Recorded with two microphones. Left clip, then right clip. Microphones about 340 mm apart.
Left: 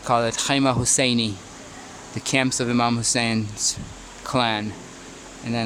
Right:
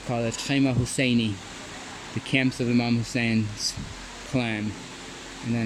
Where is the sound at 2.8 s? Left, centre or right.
Left.